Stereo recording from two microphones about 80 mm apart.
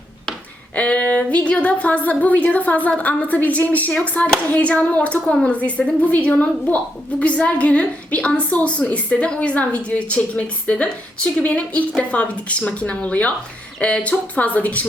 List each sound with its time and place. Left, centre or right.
0.8 s a woman's voice: centre